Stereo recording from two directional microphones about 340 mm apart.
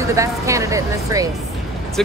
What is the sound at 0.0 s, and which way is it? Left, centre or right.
Speech, centre.